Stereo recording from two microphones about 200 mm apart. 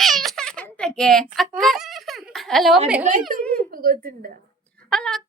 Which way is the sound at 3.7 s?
50° right (ahead or behind).